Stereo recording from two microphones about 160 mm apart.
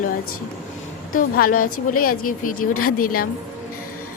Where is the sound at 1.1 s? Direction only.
60° left (ahead or behind).